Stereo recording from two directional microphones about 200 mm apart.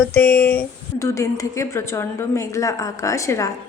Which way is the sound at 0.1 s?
10° left (ahead or behind).